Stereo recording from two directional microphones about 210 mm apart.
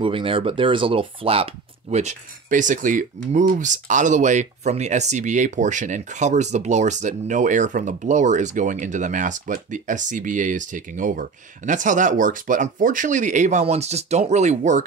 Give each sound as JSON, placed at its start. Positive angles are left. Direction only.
{"t": 0.0, "sound": "speech", "side_deg": -25}